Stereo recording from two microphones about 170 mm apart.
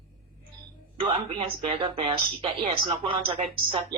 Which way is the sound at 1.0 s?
35° right (ahead or behind).